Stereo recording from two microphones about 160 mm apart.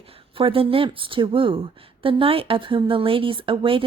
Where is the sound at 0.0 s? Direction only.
35° right (ahead or behind).